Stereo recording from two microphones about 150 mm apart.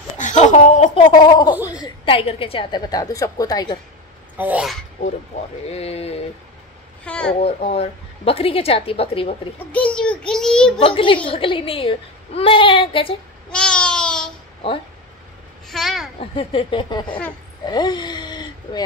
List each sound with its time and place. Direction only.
0.2 s laughter: 55° left (ahead or behind)
0.9 s gargling: 35° left (ahead or behind)
1.7 s a woman's voice: 30° left (ahead or behind)
2.9 s speech: 25° left (ahead or behind)
4.4 s speech: 10° right (ahead or behind)
5.7 s a sound: 45° left (ahead or behind)
7.1 s a child's voice: 5° left (ahead or behind)
7.4 s a woman's voice: 40° left (ahead or behind)
9.7 s a child's voice: 10° left (ahead or behind)
10.8 s a woman's voice: 35° left (ahead or behind)
13.5 s babbling: 5° left (ahead or behind)
15.7 s a child's voice: centre (ahead or behind)
16.2 s a woman's voice: 40° left (ahead or behind)